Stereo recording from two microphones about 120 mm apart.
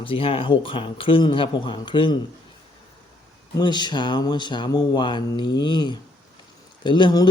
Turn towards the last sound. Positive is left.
turn(degrees=40)  # may be behind; listen again after turning